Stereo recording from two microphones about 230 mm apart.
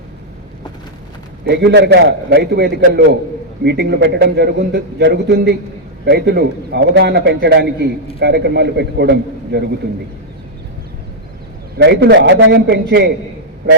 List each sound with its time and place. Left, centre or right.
1.5 s a man's voice: right
11.8 s a man's voice: right